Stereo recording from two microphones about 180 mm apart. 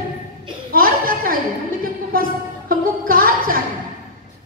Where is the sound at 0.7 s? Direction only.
55° right (ahead or behind).